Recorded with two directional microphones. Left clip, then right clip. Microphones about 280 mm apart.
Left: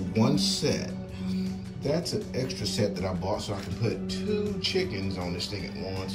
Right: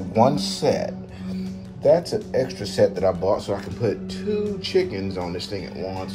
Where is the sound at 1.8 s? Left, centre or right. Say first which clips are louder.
Right 12 dB; left.